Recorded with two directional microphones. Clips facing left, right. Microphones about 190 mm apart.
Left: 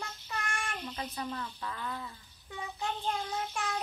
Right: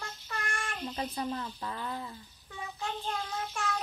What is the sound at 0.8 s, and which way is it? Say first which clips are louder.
Speech: right 8 dB; 30° right (ahead or behind).